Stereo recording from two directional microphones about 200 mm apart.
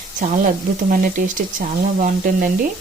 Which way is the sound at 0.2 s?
45° right (ahead or behind).